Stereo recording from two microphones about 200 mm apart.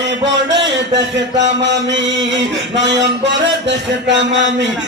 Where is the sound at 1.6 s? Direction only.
65° right (ahead or behind).